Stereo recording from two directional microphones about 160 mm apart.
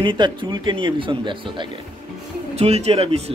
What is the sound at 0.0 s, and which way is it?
Speech, 30° right (ahead or behind).